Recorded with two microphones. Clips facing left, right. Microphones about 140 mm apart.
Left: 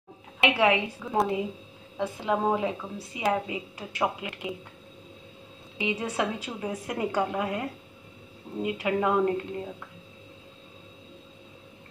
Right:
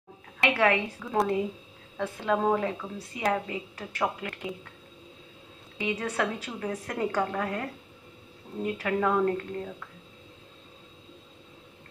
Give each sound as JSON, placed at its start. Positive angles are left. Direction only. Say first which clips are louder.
{"t": 0.5, "sound": "a woman's voice", "louder": "left 1 dB", "side_deg": 15}
{"t": 1.1, "sound": "a woman's voice", "louder": "even", "side_deg": 5}
{"t": 2.0, "sound": "a woman's voice", "louder": "even", "side_deg": 15}
{"t": 5.8, "sound": "a woman's voice", "louder": "left 1 dB", "side_deg": 10}